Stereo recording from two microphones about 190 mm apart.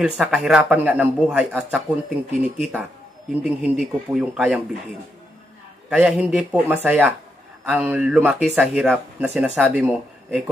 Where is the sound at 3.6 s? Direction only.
5° right (ahead or behind).